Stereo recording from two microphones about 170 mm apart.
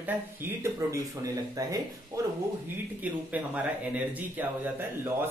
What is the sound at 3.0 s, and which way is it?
Speech, 10° right (ahead or behind).